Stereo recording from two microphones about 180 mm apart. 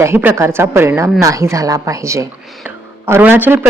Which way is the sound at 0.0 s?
15° right (ahead or behind).